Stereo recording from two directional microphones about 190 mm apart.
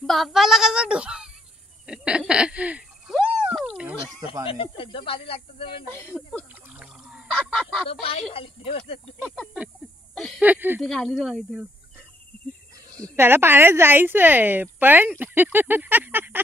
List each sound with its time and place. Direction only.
0.0 s speech: centre (ahead or behind)
1.9 s a sound: 5° right (ahead or behind)
4.5 s speech: 30° left (ahead or behind)
6.1 s speech: centre (ahead or behind)
6.5 s goose: 5° right (ahead or behind)
8.0 s speech: 30° left (ahead or behind)
9.2 s speech: centre (ahead or behind)
10.8 s speech: centre (ahead or behind)
12.9 s speech: 15° right (ahead or behind)